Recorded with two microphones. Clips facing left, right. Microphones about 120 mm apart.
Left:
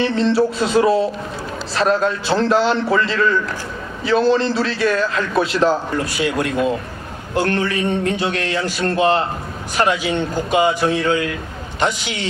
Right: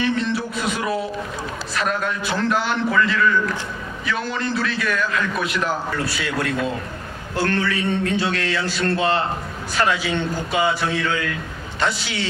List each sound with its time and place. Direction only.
0.0 s a man's voice: 30° left (ahead or behind)